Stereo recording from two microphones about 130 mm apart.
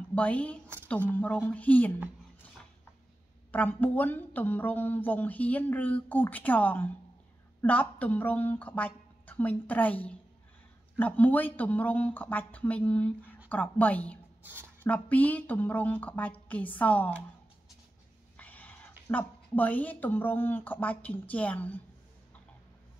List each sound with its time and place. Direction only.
0.1 s speech: 10° left (ahead or behind)
3.5 s speech: 15° left (ahead or behind)
14.4 s speech: 15° right (ahead or behind)
14.8 s speech: 10° left (ahead or behind)
18.4 s speech: 10° left (ahead or behind)